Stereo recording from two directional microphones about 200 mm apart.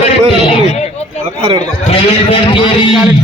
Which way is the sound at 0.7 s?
35° left (ahead or behind).